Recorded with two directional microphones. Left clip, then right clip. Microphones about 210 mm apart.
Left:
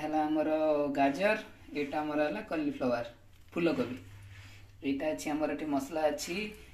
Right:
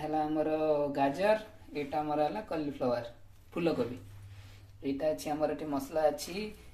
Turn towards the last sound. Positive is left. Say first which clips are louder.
# right 1 dB
turn(degrees=-5)  # may be behind; listen again after turning